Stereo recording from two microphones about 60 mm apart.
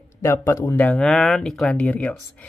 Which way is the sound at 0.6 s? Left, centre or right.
Left.